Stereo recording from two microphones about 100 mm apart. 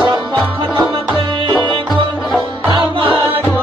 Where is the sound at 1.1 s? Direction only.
50° right (ahead or behind).